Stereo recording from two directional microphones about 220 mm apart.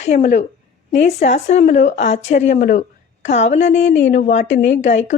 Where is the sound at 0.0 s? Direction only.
35° left (ahead or behind).